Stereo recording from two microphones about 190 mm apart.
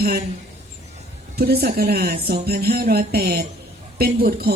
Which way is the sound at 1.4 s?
55° right (ahead or behind).